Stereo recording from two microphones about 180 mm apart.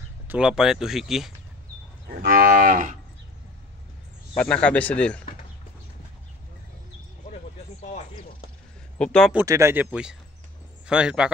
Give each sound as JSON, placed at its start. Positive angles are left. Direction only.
{"t": 0.3, "sound": "speech", "side_deg": -5}
{"t": 2.0, "sound": "cattle", "side_deg": -60}
{"t": 4.4, "sound": "speech", "side_deg": 5}
{"t": 7.8, "sound": "chopping", "side_deg": 35}
{"t": 8.9, "sound": "speech", "side_deg": 5}
{"t": 9.3, "sound": "speech", "side_deg": -15}